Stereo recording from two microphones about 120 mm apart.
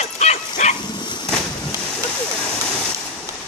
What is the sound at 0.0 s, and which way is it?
Dog, 70° left (ahead or behind).